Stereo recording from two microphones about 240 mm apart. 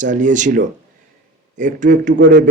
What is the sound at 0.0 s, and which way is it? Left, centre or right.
A man's voice, right.